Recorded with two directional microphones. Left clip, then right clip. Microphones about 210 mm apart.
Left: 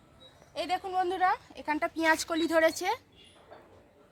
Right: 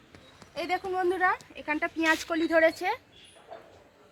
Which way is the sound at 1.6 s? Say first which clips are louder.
Right 1 dB; 55° left (ahead or behind).